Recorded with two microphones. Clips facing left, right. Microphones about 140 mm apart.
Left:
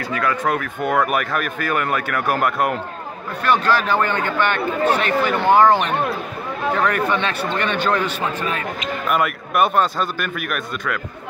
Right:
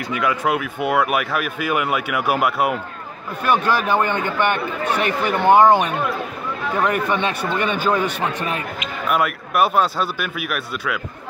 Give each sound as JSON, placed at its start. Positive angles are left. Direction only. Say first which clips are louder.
{"t": 0.1, "sound": "a man's voice", "louder": "right 1 dB", "side_deg": -10}
{"t": 9.1, "sound": "a man's voice", "louder": "right 1 dB", "side_deg": 0}